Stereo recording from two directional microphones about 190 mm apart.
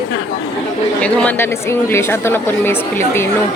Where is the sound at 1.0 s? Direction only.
5° left (ahead or behind).